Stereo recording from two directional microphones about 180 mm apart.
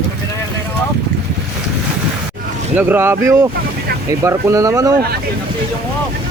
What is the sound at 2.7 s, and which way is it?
Speech, 10° right (ahead or behind).